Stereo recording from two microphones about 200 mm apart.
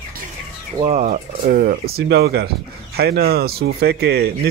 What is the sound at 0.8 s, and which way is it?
Speech, 30° right (ahead or behind).